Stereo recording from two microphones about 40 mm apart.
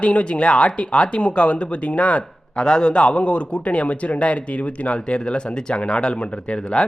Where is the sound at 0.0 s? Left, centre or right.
Left.